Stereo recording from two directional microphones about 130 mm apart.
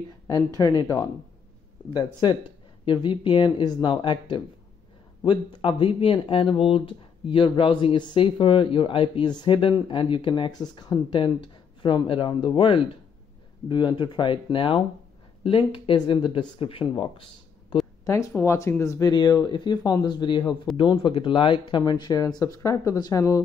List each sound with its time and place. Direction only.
0.3 s speech: 30° left (ahead or behind)
18.0 s speech: 20° left (ahead or behind)